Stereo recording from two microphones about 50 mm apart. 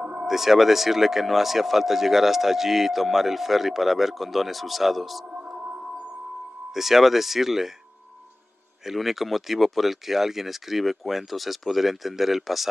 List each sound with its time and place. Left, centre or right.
0.0 s a sound: centre
0.3 s speech: centre
5.3 s music: right
6.7 s speech: centre
8.8 s speech: centre